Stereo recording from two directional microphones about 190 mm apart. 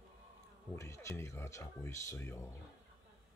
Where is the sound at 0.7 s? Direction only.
15° left (ahead or behind).